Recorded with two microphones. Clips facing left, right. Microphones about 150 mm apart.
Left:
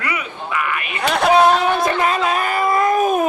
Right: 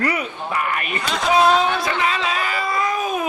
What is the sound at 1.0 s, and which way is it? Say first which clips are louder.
Speech: left 7 dB; 60° left (ahead or behind).